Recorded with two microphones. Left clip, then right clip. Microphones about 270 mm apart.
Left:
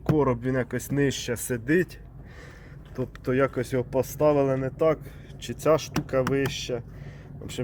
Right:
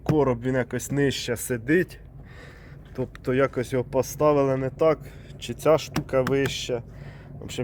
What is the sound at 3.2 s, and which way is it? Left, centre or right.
Speech, centre.